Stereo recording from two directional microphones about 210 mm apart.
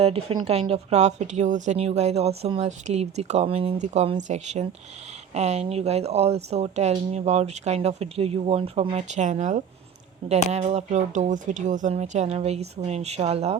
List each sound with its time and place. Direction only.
0.0 s speech: 25° right (ahead or behind)